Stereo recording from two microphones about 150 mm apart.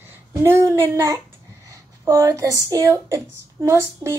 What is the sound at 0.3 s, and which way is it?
Speech, 20° right (ahead or behind).